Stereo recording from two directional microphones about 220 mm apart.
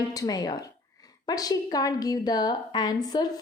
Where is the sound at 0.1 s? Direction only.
15° left (ahead or behind).